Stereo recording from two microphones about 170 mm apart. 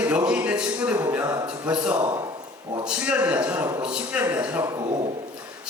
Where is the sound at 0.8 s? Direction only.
15° right (ahead or behind).